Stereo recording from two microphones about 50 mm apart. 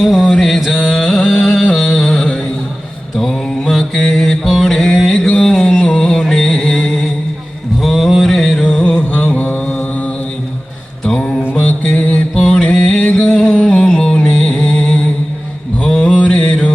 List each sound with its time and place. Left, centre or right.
0.0 s mantra: centre
0.7 s music: centre
3.2 s mantra: centre
4.6 s music: centre
6.1 s music: centre
6.8 s a sound: centre
7.9 s music: centre
9.0 s mantra: left
11.0 s mantra: centre
11.5 s mantra: left
12.7 s music: centre
16.0 s mantra: left